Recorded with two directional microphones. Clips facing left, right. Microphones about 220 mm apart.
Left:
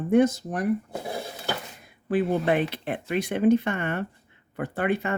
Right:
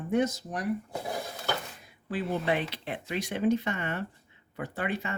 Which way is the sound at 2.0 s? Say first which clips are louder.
Left 6 dB; 55° left (ahead or behind).